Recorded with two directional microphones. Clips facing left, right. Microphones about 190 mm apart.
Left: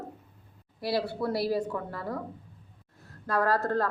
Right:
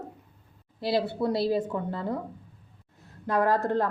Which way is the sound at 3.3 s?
20° right (ahead or behind).